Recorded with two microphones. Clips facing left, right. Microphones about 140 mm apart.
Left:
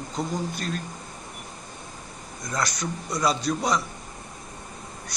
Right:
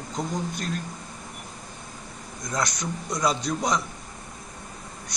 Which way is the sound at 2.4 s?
5° left (ahead or behind).